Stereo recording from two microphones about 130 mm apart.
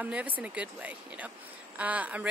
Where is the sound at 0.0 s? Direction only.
10° right (ahead or behind).